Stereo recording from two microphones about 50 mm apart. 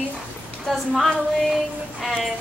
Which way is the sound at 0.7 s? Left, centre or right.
Centre.